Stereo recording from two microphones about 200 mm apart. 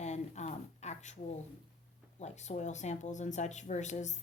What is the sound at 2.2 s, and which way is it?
Speech, 35° left (ahead or behind).